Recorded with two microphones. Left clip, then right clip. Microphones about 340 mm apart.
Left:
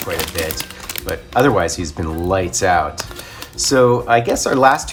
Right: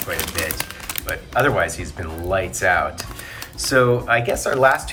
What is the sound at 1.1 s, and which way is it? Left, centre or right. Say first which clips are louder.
Speech: left 4 dB; centre.